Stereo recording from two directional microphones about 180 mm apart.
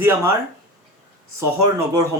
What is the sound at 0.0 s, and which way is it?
Speech, 15° right (ahead or behind).